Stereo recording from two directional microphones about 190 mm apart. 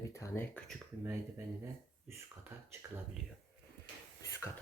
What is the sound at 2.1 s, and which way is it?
Speech, 15° right (ahead or behind).